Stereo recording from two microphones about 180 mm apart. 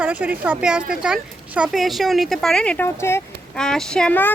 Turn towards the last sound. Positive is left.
turn(degrees=10)  # may be behind; listen again after turning